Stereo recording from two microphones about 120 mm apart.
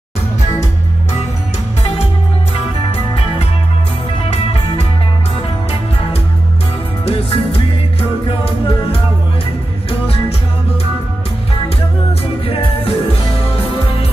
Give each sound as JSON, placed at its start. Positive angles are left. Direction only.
{"t": 7.1, "sound": "music", "side_deg": 50}
{"t": 12.4, "sound": "music", "side_deg": 50}